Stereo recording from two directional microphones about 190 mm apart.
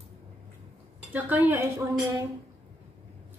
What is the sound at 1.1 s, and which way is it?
A woman's voice, 10° right (ahead or behind).